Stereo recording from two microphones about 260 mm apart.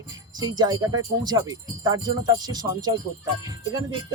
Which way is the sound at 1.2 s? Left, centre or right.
Centre.